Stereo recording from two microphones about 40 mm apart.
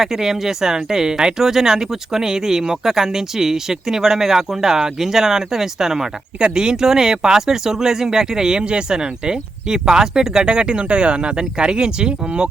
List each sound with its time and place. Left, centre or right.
0.0 s speech: centre